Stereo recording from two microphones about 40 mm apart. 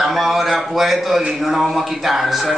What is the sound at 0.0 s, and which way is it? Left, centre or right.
A man's voice, centre.